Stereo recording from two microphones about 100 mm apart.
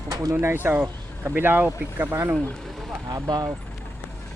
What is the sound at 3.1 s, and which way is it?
Speech, 45° right (ahead or behind).